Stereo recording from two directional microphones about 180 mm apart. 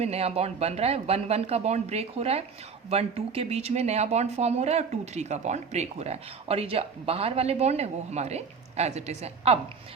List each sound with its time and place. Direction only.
0.0 s speech: 35° right (ahead or behind)